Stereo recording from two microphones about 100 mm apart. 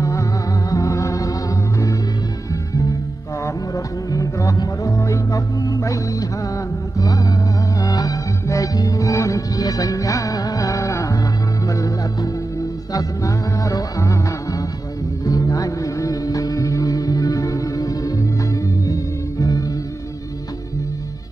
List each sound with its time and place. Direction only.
0.0 s music: 30° left (ahead or behind)
3.4 s music: 35° left (ahead or behind)